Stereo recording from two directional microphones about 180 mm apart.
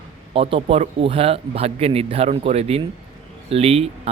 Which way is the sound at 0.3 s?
30° right (ahead or behind).